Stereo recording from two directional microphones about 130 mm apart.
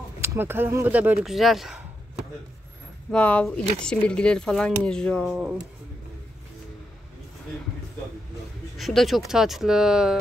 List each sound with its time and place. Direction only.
0.2 s speech: 15° right (ahead or behind)
1.2 s speech: centre (ahead or behind)
3.1 s speech: 10° left (ahead or behind)
8.7 s speech: centre (ahead or behind)